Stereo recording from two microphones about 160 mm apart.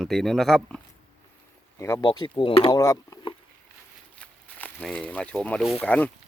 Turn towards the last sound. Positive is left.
turn(degrees=10)  # may be behind; listen again after turning